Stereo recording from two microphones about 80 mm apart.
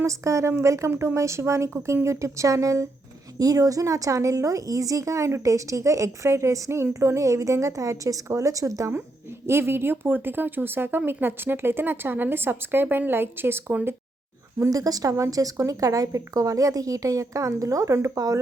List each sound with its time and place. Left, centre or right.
0.0 s a woman's voice: right
9.5 s speech: right
14.6 s a woman's voice: right